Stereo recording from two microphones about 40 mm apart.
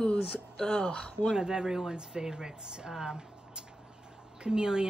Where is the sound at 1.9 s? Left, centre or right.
Right.